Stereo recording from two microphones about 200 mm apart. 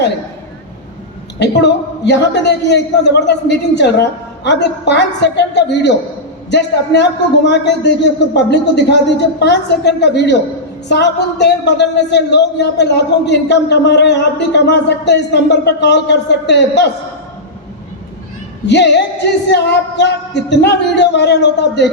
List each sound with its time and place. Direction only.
1.4 s a man's voice: 60° left (ahead or behind)
18.6 s a man's voice: 60° left (ahead or behind)